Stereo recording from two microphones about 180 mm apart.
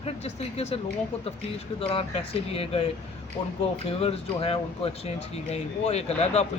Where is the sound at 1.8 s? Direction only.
30° left (ahead or behind).